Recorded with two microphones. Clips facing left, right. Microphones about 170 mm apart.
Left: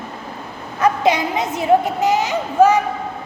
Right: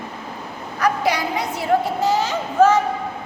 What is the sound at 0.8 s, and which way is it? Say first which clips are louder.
A woman's voice: left 4 dB; 20° left (ahead or behind).